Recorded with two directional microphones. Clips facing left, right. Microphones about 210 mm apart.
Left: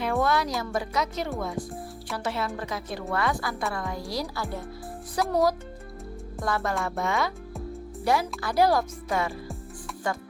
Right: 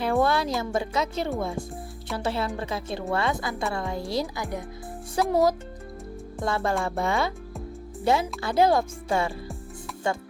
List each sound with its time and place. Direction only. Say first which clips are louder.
0.0 s music: right 2 dB; 30° right (ahead or behind)
0.6 s a woman's voice: right 2 dB; 25° right (ahead or behind)
5.2 s a woman's voice: right 3 dB; 25° right (ahead or behind)
6.4 s a woman's voice: right 2 dB; 30° right (ahead or behind)